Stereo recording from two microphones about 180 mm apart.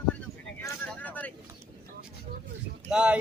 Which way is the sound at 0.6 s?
10° left (ahead or behind).